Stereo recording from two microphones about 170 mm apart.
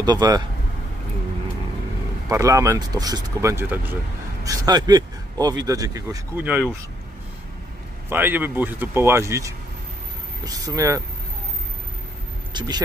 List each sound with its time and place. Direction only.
0.0 s speech: 25° right (ahead or behind)
2.2 s speech: 20° right (ahead or behind)
6.4 s a man's voice: 10° right (ahead or behind)
8.1 s a man's voice: 10° right (ahead or behind)
12.5 s speech: 25° right (ahead or behind)